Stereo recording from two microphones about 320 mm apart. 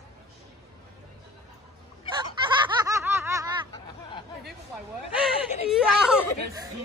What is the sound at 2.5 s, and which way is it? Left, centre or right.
Snicker, centre.